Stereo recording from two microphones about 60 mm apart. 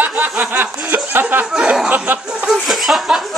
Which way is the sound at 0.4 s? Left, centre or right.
Right.